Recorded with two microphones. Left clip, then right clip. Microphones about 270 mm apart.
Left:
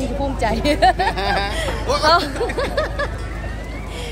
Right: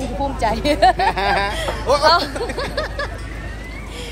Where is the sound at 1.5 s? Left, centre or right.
Centre.